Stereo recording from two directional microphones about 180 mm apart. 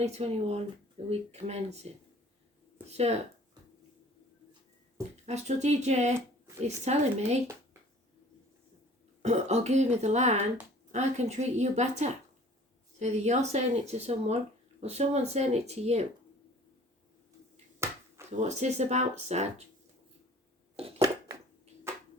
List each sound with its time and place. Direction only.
0.0 s speech: 35° right (ahead or behind)
5.2 s speech: 40° right (ahead or behind)
9.2 s speech: 40° right (ahead or behind)
17.8 s finger snapping: 15° right (ahead or behind)
18.3 s speech: 40° right (ahead or behind)
21.9 s a sound: 15° right (ahead or behind)